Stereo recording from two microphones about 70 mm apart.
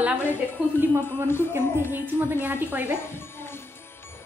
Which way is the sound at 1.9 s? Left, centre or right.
Right.